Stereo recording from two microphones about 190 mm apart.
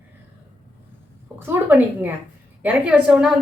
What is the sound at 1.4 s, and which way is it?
A woman's voice, 10° right (ahead or behind).